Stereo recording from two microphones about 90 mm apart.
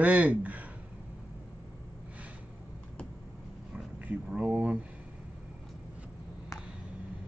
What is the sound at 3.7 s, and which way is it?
Speech, 15° right (ahead or behind).